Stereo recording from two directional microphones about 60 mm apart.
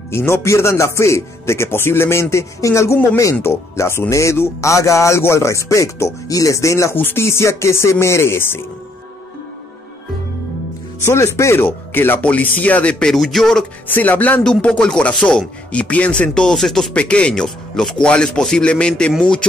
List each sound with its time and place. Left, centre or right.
0.1 s a man's voice: left
7.0 s speech: left
7.2 s speech: left
11.1 s speech: left
11.6 s speech: left
13.0 s speech: centre
13.8 s speech: left
14.4 s speech: centre
15.7 s speech: left; by 16.9 s centre
16.9 s speech: centre